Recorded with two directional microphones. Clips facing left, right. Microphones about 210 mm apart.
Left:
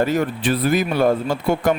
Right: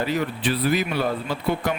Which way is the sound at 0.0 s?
45° left (ahead or behind).